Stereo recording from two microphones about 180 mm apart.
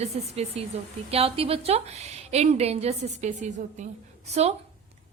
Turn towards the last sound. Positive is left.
turn(degrees=-35)  # may be behind; listen again after turning